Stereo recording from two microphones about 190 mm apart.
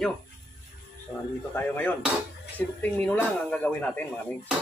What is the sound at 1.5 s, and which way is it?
Speech, 10° left (ahead or behind).